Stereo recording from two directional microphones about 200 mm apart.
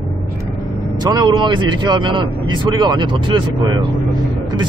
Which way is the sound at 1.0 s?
20° right (ahead or behind).